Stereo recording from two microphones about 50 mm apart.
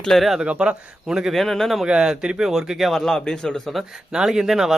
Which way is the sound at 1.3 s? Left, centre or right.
Centre.